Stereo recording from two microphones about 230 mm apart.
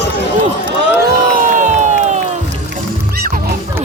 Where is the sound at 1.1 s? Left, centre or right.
Right.